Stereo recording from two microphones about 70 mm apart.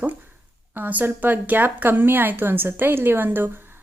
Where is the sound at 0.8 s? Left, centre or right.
Right.